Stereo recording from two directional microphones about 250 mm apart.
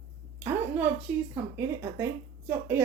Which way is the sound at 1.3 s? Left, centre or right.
Centre.